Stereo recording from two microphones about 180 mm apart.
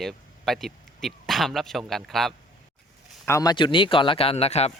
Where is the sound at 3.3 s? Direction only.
20° left (ahead or behind); by 4.7 s 35° left (ahead or behind).